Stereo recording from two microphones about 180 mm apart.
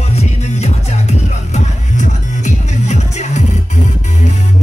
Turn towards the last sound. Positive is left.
turn(degrees=40)  # may be behind; listen again after turning